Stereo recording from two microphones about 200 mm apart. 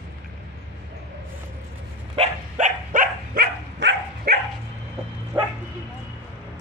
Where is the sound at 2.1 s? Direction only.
35° right (ahead or behind); by 4.3 s 60° right (ahead or behind).